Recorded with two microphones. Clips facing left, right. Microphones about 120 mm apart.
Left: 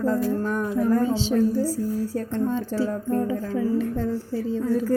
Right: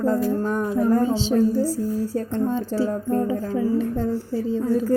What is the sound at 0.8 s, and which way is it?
Speech, 30° right (ahead or behind).